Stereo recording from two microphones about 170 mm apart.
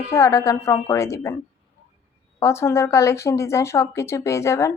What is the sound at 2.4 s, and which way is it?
Speech, 15° left (ahead or behind).